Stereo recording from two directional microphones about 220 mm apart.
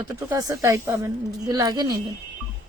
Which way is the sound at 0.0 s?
15° right (ahead or behind).